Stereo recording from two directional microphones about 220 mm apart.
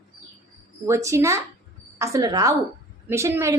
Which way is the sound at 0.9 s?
15° right (ahead or behind).